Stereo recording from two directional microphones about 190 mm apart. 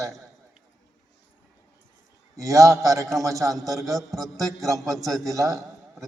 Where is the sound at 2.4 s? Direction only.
15° right (ahead or behind).